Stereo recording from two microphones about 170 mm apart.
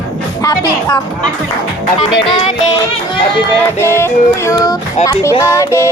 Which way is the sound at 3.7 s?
15° left (ahead or behind).